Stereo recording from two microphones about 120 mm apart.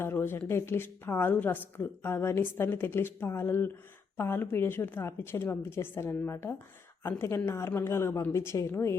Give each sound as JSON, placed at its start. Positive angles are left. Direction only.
{"t": 0.0, "sound": "a woman's voice", "side_deg": 20}